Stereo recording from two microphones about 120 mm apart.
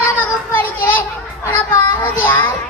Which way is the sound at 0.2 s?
15° left (ahead or behind).